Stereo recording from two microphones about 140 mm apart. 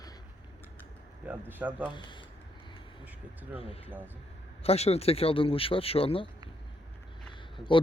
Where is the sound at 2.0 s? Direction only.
35° left (ahead or behind).